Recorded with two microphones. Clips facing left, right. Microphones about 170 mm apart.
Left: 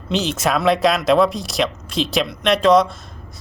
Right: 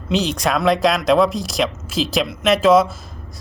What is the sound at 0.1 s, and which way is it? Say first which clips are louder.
Speech: right 1 dB; centre (ahead or behind).